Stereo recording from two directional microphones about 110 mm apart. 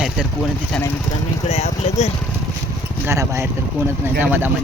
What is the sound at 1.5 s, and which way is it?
Speech, 80° left.